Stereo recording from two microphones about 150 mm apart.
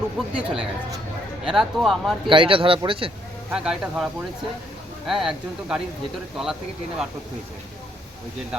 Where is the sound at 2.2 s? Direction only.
35° right (ahead or behind).